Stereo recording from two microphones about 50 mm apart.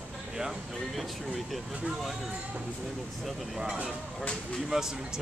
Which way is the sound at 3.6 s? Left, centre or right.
Right.